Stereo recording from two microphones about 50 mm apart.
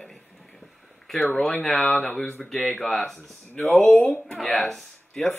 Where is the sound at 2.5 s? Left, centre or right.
Centre.